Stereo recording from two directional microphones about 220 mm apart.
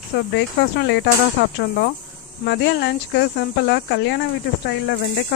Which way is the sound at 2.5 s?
50° left (ahead or behind).